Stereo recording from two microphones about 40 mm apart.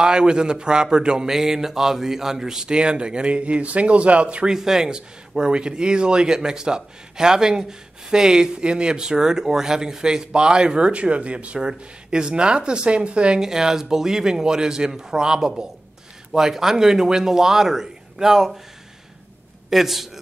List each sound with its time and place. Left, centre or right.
0.0 s speech: right
4.6 s speech: centre
13.4 s speech: centre
19.7 s a man's voice: centre